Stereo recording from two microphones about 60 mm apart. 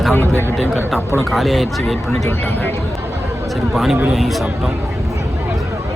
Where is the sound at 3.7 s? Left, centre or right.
Centre.